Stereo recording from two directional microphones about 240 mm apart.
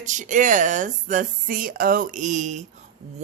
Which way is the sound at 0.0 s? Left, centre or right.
Right.